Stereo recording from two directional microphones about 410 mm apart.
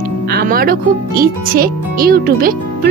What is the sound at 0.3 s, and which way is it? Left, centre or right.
Speech, right.